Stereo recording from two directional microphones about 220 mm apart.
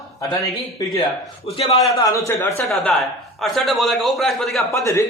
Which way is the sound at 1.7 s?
15° left (ahead or behind).